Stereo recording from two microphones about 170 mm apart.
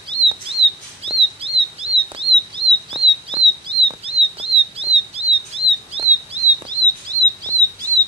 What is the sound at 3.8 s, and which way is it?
Chirp, 35° right (ahead or behind).